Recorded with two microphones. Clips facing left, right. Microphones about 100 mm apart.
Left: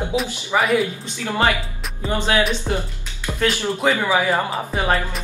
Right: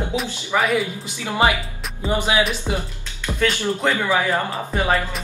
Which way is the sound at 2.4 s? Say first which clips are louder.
Left 1 dB; 5° right (ahead or behind).